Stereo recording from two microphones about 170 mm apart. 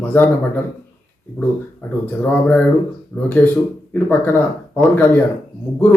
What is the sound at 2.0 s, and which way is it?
Speech, 10° left (ahead or behind).